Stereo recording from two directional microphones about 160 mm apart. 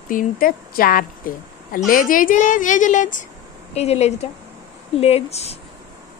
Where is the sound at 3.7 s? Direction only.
40° left (ahead or behind).